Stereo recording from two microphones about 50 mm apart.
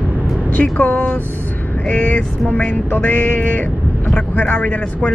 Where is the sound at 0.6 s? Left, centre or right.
Left.